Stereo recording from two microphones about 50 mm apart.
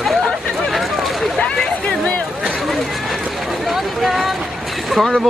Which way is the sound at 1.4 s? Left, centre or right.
Centre.